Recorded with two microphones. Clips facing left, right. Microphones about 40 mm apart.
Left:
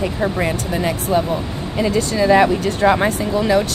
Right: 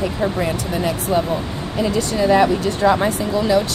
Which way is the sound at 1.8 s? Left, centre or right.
Left.